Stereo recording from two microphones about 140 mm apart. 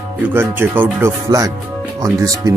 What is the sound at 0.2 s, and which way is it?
Speech, 15° right (ahead or behind).